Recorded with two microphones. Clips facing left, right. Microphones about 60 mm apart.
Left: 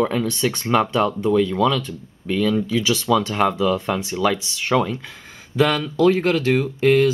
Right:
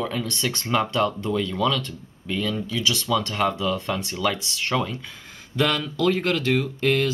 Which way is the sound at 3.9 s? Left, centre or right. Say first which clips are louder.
Left 5 dB; left.